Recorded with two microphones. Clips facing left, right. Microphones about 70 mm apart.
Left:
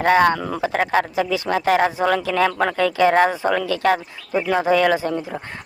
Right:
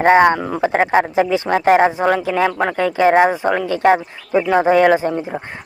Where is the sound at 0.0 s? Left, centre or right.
Right.